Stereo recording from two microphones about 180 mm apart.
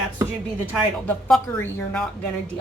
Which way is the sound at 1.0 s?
10° left (ahead or behind).